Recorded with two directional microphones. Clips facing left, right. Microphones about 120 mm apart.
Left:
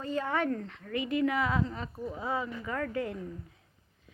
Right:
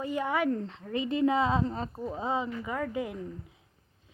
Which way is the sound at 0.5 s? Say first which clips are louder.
Right 2 dB; 25° right (ahead or behind).